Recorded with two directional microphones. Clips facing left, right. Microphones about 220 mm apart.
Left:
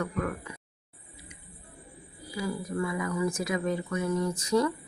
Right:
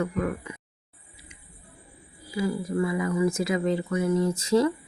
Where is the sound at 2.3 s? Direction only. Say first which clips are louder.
Right 5 dB; 20° right (ahead or behind).